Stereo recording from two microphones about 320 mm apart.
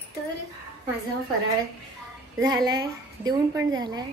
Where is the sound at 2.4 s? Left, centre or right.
Centre.